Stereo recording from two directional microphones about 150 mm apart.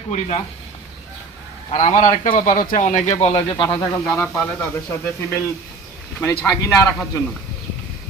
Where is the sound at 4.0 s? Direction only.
5° left (ahead or behind).